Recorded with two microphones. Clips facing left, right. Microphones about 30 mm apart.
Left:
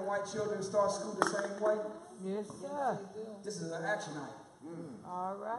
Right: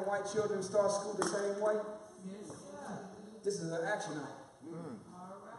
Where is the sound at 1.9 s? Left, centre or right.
Left.